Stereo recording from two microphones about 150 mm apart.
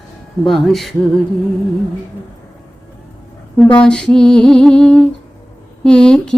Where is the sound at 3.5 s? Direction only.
5° left (ahead or behind).